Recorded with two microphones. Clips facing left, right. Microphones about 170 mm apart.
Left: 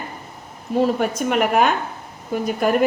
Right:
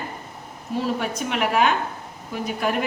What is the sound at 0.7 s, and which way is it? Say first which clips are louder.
A woman's voice: left 6 dB; 45° left (ahead or behind).